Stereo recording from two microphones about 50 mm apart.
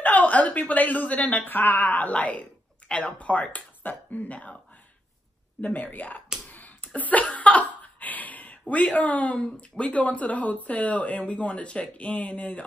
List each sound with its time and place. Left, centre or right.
0.0 s a woman's voice: left
5.6 s a woman's voice: left
6.5 s a sound: left
9.6 s speech: left